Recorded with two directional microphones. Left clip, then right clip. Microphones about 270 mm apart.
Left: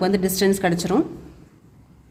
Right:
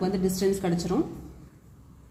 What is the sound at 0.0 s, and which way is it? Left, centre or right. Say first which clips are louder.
Speech: left 6 dB; left.